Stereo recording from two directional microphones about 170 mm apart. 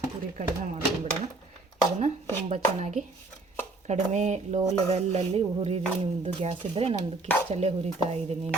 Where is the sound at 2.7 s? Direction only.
40° right (ahead or behind).